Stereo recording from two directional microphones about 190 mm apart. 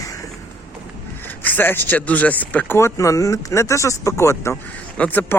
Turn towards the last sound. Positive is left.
turn(degrees=10)  # may be behind; listen again after turning